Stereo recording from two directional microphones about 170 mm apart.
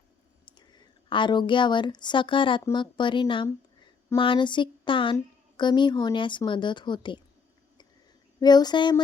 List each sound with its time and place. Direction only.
0.4 s speech: 25° left (ahead or behind)
8.4 s speech: 25° left (ahead or behind)